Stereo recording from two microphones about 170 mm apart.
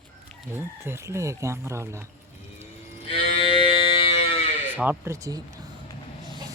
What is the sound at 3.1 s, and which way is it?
Cattle, 30° left (ahead or behind).